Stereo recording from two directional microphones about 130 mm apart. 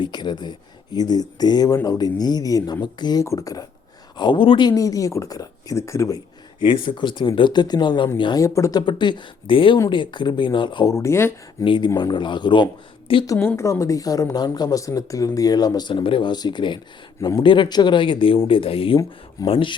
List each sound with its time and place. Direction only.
0.0 s speech: 35° left (ahead or behind)
4.2 s speech: 40° left (ahead or behind); by 6.2 s 25° left (ahead or behind)
6.6 s speech: 35° left (ahead or behind)
8.4 s speech: 25° left (ahead or behind)
8.9 s speech: 35° left (ahead or behind)
10.8 s speech: 20° left (ahead or behind)
11.6 s speech: 40° left (ahead or behind)
13.2 s speech: 25° left (ahead or behind)
17.2 s speech: 25° left (ahead or behind)
17.4 s speech: 40° left (ahead or behind)